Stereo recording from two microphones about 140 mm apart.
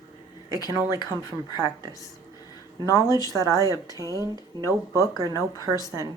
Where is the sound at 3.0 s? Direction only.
25° right (ahead or behind).